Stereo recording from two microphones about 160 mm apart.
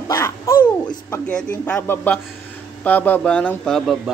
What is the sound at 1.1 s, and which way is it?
A man's voice, 10° left (ahead or behind).